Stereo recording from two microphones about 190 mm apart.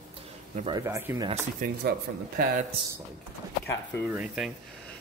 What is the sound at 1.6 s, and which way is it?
Speech, 55° right (ahead or behind).